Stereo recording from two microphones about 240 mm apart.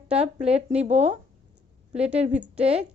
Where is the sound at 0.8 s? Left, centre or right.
Right.